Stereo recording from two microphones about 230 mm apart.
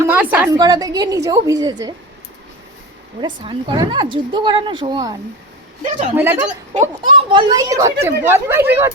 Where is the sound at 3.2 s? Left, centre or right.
Right.